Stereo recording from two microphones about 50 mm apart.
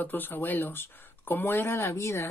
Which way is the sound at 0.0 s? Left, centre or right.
Left.